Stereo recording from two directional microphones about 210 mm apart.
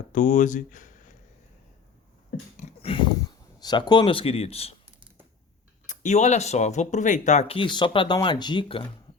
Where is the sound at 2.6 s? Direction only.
25° left (ahead or behind).